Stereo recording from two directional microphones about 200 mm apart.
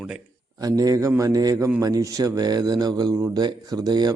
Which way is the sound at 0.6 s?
20° right (ahead or behind).